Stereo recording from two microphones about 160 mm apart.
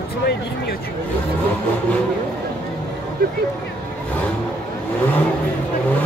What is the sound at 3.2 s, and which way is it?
Speech, 75° right (ahead or behind).